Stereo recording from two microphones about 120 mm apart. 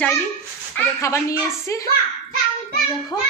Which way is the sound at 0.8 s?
25° left (ahead or behind).